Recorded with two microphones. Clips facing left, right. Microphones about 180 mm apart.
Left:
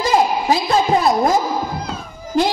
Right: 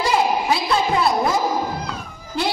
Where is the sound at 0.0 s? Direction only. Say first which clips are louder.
Left 3 dB; 40° left (ahead or behind).